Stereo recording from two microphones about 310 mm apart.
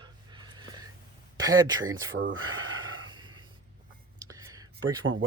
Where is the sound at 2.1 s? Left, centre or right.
Right.